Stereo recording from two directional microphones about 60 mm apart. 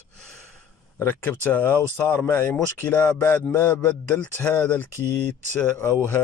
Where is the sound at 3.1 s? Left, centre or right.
Left.